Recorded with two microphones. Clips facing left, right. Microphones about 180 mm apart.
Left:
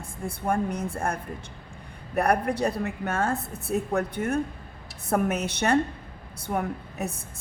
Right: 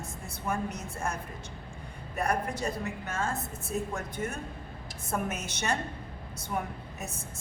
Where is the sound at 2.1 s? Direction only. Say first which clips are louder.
Left 7 dB; 65° left (ahead or behind).